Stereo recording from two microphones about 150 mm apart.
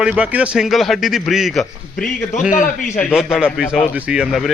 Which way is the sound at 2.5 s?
60° left (ahead or behind).